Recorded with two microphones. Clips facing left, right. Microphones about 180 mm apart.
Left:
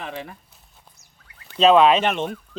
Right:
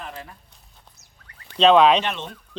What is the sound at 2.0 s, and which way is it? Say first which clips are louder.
Speech: left 6 dB; 55° left (ahead or behind).